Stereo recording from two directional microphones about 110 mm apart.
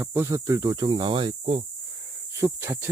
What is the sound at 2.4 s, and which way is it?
Speech, 25° right (ahead or behind).